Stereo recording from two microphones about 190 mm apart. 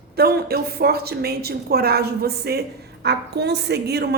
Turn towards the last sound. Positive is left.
turn(degrees=-60)  # may be behind; listen again after turning